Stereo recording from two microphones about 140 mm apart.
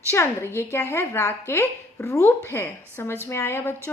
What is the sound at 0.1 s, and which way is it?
A woman's voice, 15° left (ahead or behind).